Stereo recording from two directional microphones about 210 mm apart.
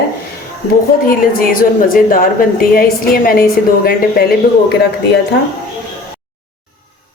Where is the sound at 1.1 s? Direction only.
40° left (ahead or behind).